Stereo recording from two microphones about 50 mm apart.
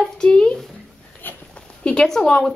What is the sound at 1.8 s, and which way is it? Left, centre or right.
Speech, left.